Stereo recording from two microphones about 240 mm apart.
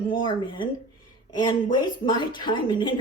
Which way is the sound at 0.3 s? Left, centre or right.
Centre.